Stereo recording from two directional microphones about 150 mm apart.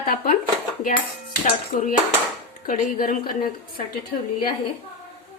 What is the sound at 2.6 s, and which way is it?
A woman's voice, 70° left (ahead or behind).